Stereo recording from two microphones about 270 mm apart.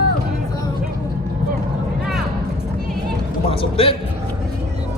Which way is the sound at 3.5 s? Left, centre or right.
Centre.